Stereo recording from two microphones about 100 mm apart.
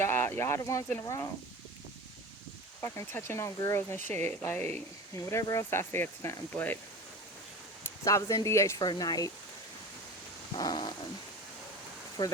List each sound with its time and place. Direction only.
0.0 s speech: 25° left (ahead or behind)
2.8 s speech: 25° left (ahead or behind)
4.1 s speech: 90° right
4.4 s speech: 15° left (ahead or behind)
5.1 s speech: 35° left (ahead or behind)
7.9 s speech: 30° left (ahead or behind)
8.8 s speech: 45° left (ahead or behind)
10.6 s dog: 45° left (ahead or behind)
12.2 s dog: 45° left (ahead or behind)